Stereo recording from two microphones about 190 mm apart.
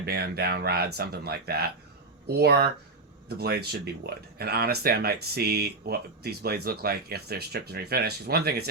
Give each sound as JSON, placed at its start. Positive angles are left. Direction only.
{"t": 0.0, "sound": "speech", "side_deg": -55}